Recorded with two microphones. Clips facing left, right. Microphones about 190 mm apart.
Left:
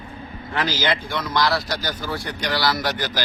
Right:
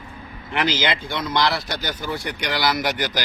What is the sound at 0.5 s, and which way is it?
A man's voice, 20° right (ahead or behind).